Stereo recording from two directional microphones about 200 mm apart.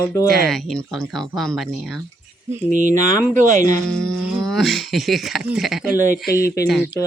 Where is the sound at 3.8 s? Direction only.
5° left (ahead or behind).